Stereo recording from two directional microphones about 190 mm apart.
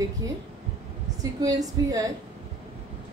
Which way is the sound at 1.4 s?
20° right (ahead or behind).